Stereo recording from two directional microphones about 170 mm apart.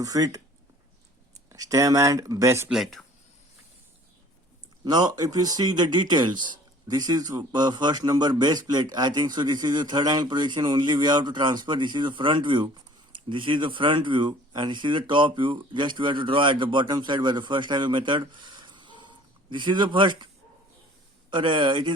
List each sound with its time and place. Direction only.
0.0 s speech: 20° right (ahead or behind)
1.5 s speech: 20° right (ahead or behind)
2.7 s speech: centre (ahead or behind)
4.9 s speech: 25° right (ahead or behind)